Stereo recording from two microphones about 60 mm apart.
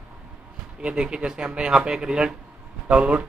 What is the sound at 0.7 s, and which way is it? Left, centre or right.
Speech, centre.